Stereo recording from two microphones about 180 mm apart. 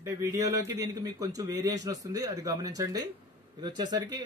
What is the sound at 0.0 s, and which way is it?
A man's voice, 15° right (ahead or behind).